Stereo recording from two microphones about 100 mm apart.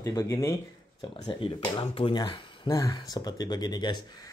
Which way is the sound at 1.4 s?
60° left (ahead or behind).